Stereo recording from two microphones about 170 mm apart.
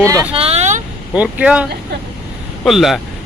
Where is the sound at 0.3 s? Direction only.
35° right (ahead or behind).